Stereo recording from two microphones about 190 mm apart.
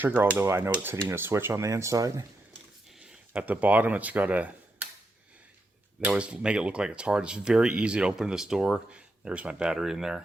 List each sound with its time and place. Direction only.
0.0 s speech: 10° right (ahead or behind)
3.0 s speech: 5° right (ahead or behind)
6.0 s speech: 5° right (ahead or behind)